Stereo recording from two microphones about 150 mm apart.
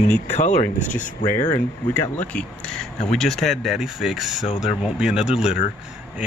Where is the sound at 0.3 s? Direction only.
50° left (ahead or behind).